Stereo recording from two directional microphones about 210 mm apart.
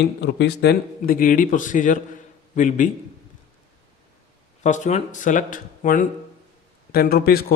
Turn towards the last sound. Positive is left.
turn(degrees=45)  # may be behind; listen again after turning